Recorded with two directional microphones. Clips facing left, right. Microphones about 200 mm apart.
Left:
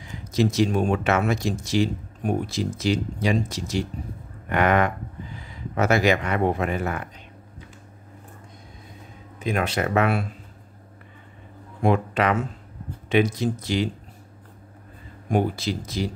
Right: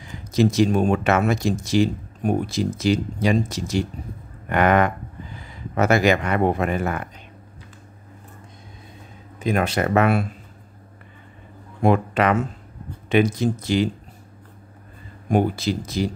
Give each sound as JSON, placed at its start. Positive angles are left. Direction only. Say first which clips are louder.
{"t": 0.4, "sound": "speech", "louder": "right 3 dB", "side_deg": -45}
{"t": 4.5, "sound": "speech", "louder": "right 2 dB", "side_deg": -45}
{"t": 9.4, "sound": "speech", "louder": "right 3 dB", "side_deg": -40}
{"t": 11.8, "sound": "speech", "louder": "right 3 dB", "side_deg": -50}
{"t": 15.3, "sound": "speech", "louder": "right 3 dB", "side_deg": -50}